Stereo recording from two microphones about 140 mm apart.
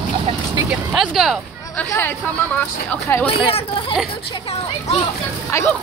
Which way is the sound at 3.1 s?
20° left (ahead or behind).